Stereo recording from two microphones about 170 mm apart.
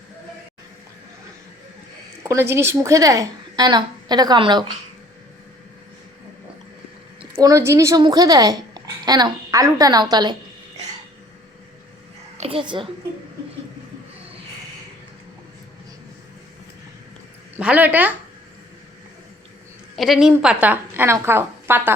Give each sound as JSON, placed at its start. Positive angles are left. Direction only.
{"t": 2.2, "sound": "a woman's voice", "side_deg": -20}
{"t": 7.2, "sound": "a woman's voice", "side_deg": -20}
{"t": 12.4, "sound": "a child's voice", "side_deg": -30}
{"t": 17.6, "sound": "a woman's voice", "side_deg": -10}
{"t": 20.0, "sound": "a woman's voice", "side_deg": 0}